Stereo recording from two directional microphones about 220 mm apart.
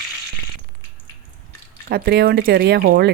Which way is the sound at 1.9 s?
45° right (ahead or behind).